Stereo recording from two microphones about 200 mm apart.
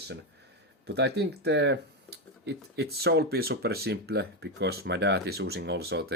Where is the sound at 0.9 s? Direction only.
55° right (ahead or behind).